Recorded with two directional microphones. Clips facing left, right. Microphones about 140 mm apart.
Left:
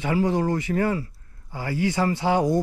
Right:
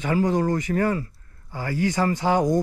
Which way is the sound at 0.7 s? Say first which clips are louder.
Right 1 dB; 40° right (ahead or behind).